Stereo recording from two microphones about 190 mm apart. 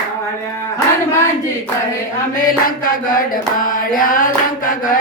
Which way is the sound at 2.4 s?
50° left (ahead or behind).